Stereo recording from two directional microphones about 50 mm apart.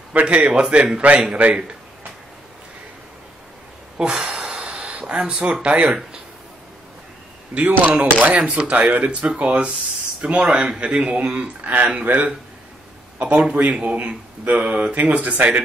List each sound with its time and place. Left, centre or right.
0.1 s speech: right
4.0 s a sound: centre
4.6 s speech: centre
7.5 s speech: right
13.2 s speech: right